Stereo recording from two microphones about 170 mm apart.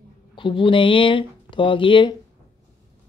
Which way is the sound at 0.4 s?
30° left (ahead or behind).